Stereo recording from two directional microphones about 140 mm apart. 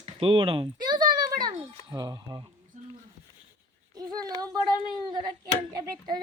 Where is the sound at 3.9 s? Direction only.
30° right (ahead or behind).